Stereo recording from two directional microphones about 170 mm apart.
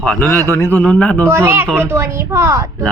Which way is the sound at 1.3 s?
15° right (ahead or behind).